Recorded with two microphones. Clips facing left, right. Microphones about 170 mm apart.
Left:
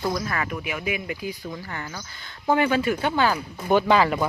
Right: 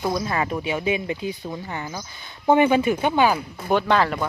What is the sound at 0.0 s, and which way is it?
Speech, 25° right (ahead or behind).